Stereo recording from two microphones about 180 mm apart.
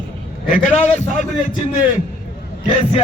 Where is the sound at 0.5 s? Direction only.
40° left (ahead or behind).